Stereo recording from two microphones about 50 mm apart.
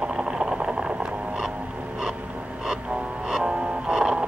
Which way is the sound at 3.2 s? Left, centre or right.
Centre.